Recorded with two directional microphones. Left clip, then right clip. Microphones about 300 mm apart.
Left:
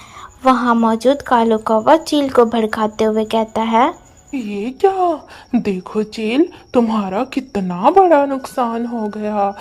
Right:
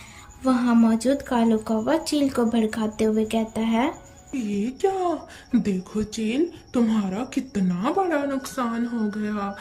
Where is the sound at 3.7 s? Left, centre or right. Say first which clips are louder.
Left 11 dB; left.